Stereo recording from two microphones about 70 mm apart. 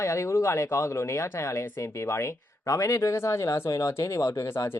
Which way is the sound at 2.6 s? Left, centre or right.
Left.